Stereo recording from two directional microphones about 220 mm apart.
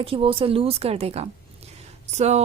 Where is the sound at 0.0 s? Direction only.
25° right (ahead or behind).